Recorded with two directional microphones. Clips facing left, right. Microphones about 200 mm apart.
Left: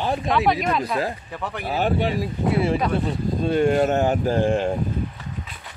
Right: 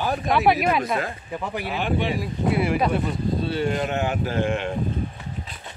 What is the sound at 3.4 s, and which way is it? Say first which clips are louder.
Speech: left 9 dB; 50° left (ahead or behind).